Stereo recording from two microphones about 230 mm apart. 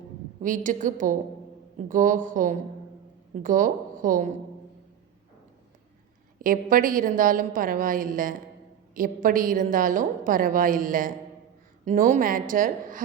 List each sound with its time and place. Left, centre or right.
0.4 s a woman's voice: right
6.4 s a woman's voice: right